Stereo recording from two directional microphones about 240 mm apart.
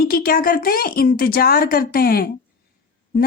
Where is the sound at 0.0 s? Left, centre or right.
Left.